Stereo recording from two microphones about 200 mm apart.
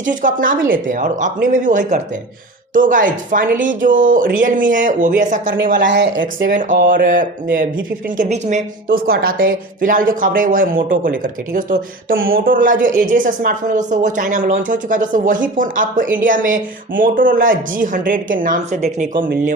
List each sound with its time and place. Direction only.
0.0 s speech: 40° right (ahead or behind)
5.8 s speech: 65° right (ahead or behind); by 18.8 s 40° right (ahead or behind)